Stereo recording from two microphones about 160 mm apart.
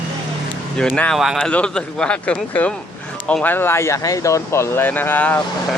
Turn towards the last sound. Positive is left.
turn(degrees=10)  # may be behind; listen again after turning